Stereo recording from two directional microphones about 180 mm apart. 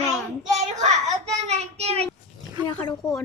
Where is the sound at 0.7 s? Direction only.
40° right (ahead or behind).